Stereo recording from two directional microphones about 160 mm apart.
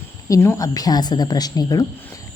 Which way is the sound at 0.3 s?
20° left (ahead or behind).